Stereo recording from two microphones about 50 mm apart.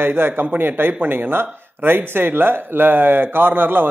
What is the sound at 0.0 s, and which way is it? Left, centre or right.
Speech, right.